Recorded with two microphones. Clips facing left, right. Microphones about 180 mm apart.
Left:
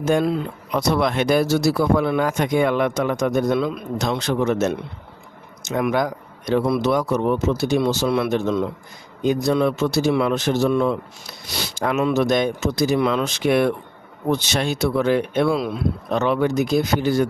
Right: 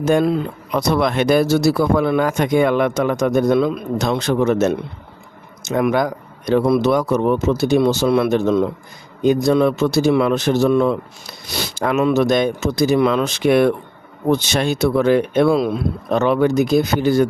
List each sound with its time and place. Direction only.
0.0 s speech: 60° right (ahead or behind)